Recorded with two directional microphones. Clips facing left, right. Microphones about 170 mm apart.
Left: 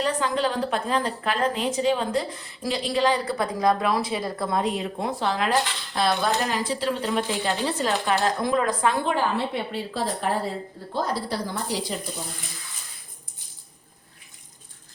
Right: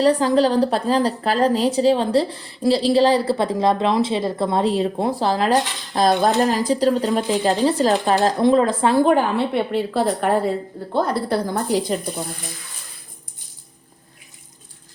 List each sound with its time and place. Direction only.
0.0 s a woman's voice: 35° right (ahead or behind)
9.9 s a woman's voice: 60° right (ahead or behind)